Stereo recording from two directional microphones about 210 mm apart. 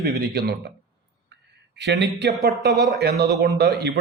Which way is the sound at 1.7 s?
55° right (ahead or behind).